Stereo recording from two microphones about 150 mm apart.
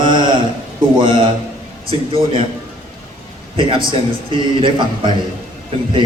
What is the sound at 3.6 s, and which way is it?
A man's voice, 35° right (ahead or behind).